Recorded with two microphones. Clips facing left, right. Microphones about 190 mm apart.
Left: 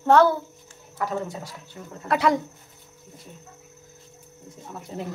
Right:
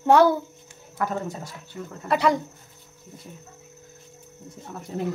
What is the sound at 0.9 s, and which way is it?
Speech, 50° right (ahead or behind).